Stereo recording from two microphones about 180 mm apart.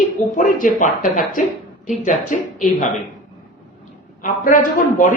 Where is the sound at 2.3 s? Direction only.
45° left (ahead or behind).